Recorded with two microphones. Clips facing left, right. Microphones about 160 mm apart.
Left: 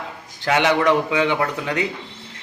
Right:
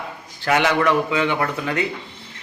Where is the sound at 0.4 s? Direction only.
15° left (ahead or behind).